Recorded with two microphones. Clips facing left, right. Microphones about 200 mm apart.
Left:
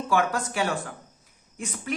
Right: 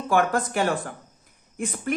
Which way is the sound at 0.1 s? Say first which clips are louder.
Right 3 dB; 55° right (ahead or behind).